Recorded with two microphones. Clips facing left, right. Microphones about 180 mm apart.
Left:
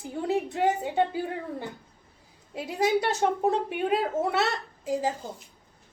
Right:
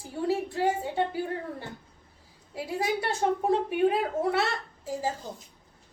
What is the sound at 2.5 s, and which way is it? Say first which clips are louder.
A woman's voice: left 4 dB; 20° left (ahead or behind).